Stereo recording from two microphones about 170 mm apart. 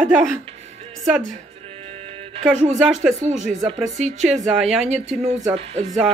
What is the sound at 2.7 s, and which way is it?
Speech, centre (ahead or behind).